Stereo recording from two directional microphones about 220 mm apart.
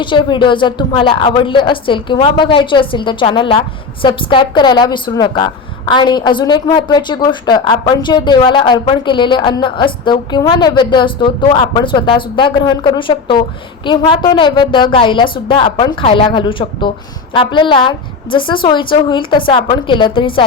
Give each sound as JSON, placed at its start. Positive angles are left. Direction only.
{"t": 0.0, "sound": "a woman's voice", "side_deg": 20}